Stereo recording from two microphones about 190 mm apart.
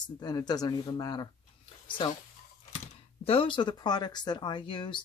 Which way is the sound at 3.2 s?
25° left (ahead or behind).